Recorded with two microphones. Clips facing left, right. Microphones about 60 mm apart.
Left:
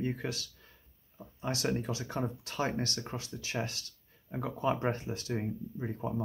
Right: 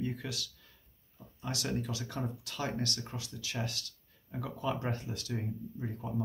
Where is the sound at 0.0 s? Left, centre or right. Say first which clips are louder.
Left 3 dB; left.